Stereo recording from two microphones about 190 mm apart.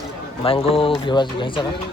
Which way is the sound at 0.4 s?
30° left (ahead or behind).